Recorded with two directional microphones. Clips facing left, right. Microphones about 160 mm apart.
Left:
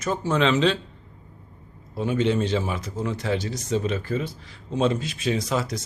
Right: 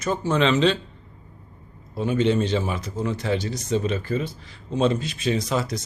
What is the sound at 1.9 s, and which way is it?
A man's voice, 5° left (ahead or behind).